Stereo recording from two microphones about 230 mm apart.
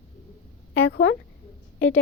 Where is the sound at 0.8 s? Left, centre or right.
Left.